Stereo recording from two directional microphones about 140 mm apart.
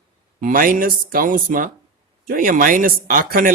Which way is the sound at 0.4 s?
85° right.